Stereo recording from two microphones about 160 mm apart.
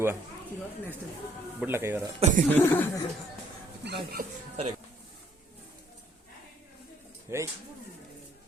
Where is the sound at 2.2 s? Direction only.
55° right (ahead or behind).